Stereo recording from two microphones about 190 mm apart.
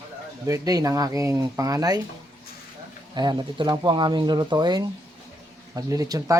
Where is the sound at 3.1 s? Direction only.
20° right (ahead or behind).